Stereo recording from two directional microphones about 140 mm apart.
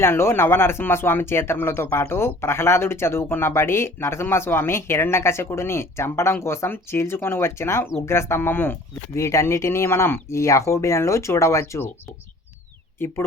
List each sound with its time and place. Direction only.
0.0 s speech: 20° left (ahead or behind)
13.0 s speech: 15° left (ahead or behind)